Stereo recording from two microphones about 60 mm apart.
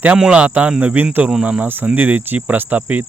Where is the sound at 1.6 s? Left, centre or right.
Right.